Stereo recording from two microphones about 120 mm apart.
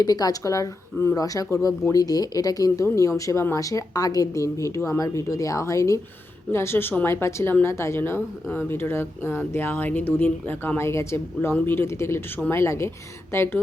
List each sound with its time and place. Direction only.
0.0 s speech: 30° left (ahead or behind)